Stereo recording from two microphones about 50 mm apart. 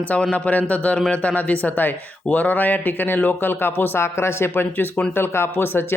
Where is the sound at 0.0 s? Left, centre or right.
Left.